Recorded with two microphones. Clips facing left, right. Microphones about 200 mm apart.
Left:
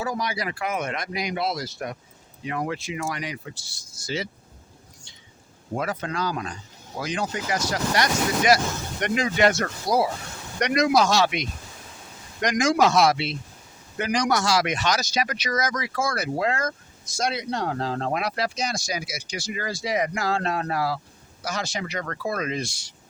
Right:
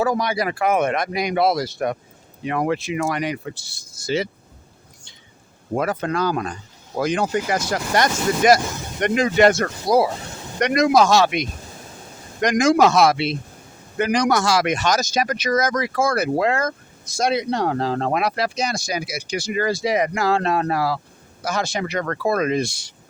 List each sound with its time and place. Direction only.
0.0 s speech: 60° right (ahead or behind)
5.7 s speech: 55° right (ahead or behind); by 21.0 s 80° right
21.4 s speech: 55° right (ahead or behind)